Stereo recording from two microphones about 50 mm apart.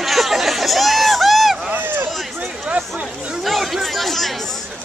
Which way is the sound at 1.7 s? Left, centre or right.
Right.